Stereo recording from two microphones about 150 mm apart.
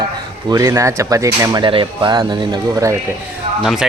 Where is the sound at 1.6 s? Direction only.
35° right (ahead or behind).